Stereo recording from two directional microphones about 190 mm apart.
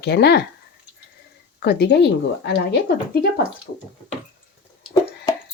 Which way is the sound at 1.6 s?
60° left (ahead or behind).